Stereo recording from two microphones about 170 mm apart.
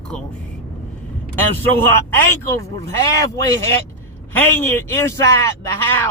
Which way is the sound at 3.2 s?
20° left (ahead or behind).